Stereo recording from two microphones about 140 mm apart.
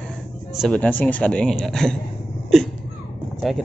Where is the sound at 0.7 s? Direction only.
10° left (ahead or behind).